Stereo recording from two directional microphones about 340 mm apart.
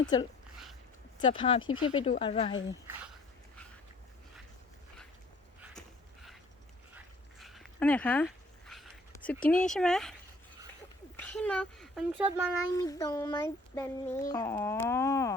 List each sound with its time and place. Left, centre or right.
0.0 s speech: centre
2.8 s speech: centre
6.9 s dog: centre
11.2 s a child's voice: centre
12.7 s speech: centre